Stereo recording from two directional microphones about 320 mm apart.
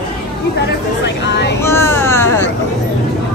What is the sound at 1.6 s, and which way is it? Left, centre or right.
Speech, centre.